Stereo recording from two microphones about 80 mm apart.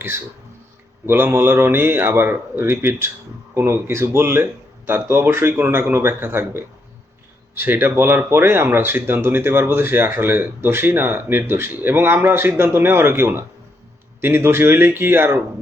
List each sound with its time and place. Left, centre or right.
1.0 s speech: right